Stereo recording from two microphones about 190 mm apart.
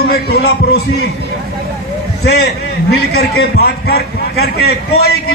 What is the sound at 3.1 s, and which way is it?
A man's voice, 55° left (ahead or behind).